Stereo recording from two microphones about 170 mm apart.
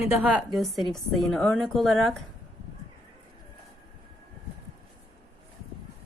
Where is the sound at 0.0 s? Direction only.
10° right (ahead or behind).